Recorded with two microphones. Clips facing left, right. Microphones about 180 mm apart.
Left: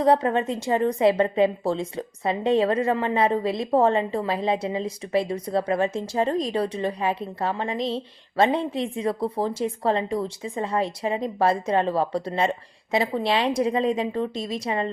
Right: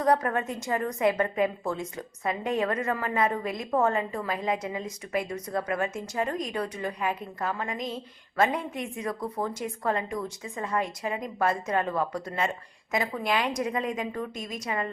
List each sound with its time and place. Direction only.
0.0 s a woman's voice: 25° left (ahead or behind)